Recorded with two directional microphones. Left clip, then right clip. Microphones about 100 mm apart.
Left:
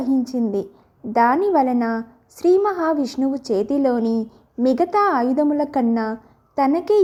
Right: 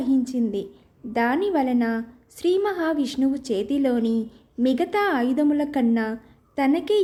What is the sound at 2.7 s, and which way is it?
Speech, 30° left (ahead or behind).